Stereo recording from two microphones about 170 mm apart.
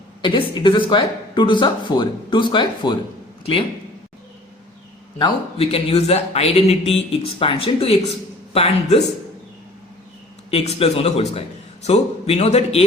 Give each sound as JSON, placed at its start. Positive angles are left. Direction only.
{"t": 0.2, "sound": "speech", "side_deg": 30}
{"t": 5.5, "sound": "speech", "side_deg": 35}
{"t": 10.5, "sound": "speech", "side_deg": 35}